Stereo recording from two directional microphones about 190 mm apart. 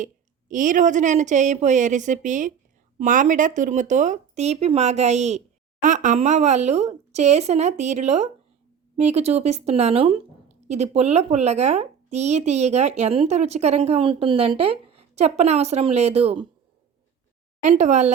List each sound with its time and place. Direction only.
0.0 s speech: 45° right (ahead or behind)
17.6 s speech: 40° right (ahead or behind)